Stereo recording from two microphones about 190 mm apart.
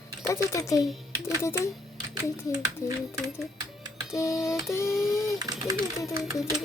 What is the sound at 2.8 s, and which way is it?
Speech, 15° left (ahead or behind).